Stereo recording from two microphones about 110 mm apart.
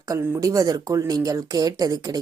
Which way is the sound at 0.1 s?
30° right (ahead or behind).